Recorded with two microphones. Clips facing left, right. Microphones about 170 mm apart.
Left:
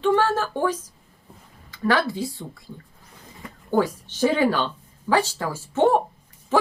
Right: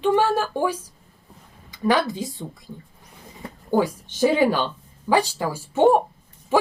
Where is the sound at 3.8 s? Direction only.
15° right (ahead or behind).